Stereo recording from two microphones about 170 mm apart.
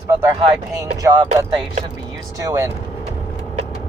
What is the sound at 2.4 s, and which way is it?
Speech, 15° right (ahead or behind).